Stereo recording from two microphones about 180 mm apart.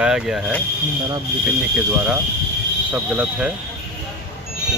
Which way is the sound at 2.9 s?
5° right (ahead or behind).